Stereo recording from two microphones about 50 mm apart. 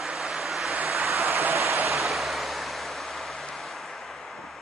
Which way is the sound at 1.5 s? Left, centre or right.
Right.